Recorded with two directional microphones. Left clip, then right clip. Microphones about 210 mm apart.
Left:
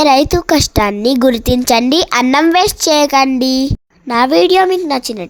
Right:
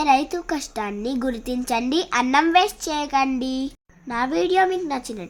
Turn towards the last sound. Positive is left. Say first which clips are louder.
# left 10 dB
turn(degrees=40)  # may be behind; listen again after turning